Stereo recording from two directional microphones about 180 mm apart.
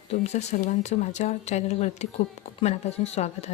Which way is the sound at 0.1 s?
40° left (ahead or behind).